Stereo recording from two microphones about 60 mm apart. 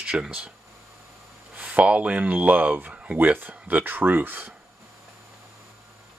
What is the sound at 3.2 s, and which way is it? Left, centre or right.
Speech, right.